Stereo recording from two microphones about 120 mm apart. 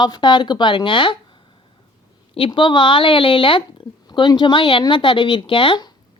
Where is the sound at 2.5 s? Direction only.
40° left (ahead or behind).